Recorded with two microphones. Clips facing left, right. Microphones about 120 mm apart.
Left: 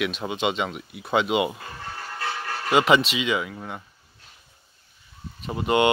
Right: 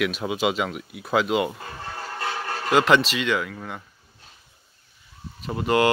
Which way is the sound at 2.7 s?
Centre (ahead or behind).